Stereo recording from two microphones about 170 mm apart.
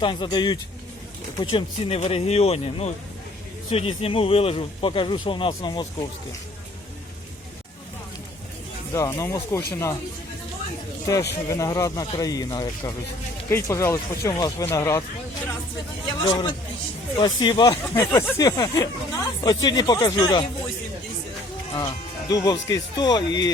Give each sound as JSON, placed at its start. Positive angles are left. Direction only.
{"t": 0.0, "sound": "speech", "side_deg": 30}
{"t": 8.9, "sound": "speech", "side_deg": 20}
{"t": 11.1, "sound": "speech", "side_deg": 20}
{"t": 16.2, "sound": "speech", "side_deg": 25}
{"t": 21.8, "sound": "speech", "side_deg": 25}